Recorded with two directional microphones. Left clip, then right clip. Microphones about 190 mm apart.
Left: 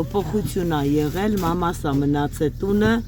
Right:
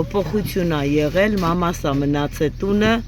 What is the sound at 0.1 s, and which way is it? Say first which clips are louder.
Speech: right 2 dB; centre (ahead or behind).